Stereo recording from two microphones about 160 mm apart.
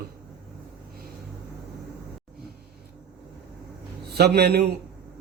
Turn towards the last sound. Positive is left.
turn(degrees=-85)